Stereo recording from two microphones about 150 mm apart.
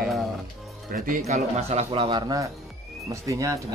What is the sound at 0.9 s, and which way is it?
Speech, 65° right (ahead or behind).